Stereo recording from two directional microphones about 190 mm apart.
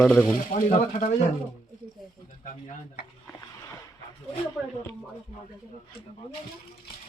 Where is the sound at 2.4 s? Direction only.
45° left (ahead or behind).